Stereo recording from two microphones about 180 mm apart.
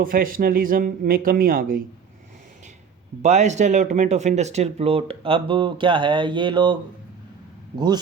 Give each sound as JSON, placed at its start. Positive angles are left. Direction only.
{"t": 0.0, "sound": "a man's voice", "side_deg": -50}
{"t": 3.2, "sound": "speech", "side_deg": -40}